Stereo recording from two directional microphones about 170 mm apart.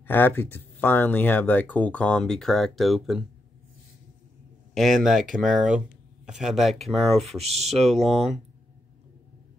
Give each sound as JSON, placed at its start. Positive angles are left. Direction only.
{"t": 0.0, "sound": "speech", "side_deg": 10}
{"t": 4.7, "sound": "speech", "side_deg": 0}
{"t": 7.4, "sound": "speech", "side_deg": -40}
{"t": 7.9, "sound": "speech", "side_deg": 0}